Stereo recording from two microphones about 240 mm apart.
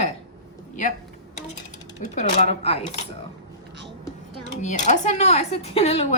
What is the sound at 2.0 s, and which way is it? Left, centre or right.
Speech, left.